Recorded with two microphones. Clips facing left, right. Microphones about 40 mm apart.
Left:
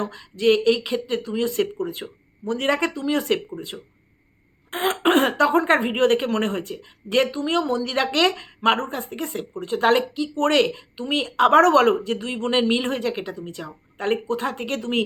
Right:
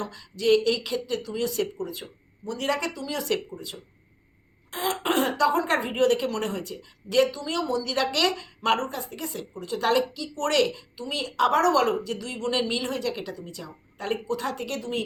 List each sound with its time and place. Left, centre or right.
0.0 s a woman's voice: left
14.8 s speech: left